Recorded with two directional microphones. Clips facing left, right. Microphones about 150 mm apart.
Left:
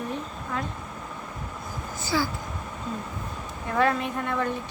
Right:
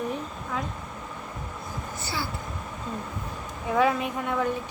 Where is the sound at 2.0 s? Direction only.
90° left.